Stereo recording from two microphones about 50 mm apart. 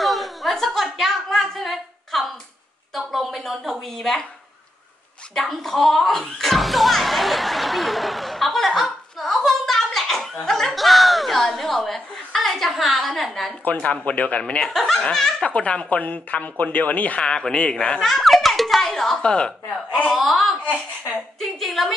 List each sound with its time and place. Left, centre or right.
0.0 s a sound: centre
2.9 s a woman's voice: centre
5.3 s speech: centre
13.7 s speech: left
14.7 s a woman's voice: centre
15.4 s speech: left
17.2 s a child's voice: centre
19.2 s a child's voice: centre
20.1 s a woman's voice: centre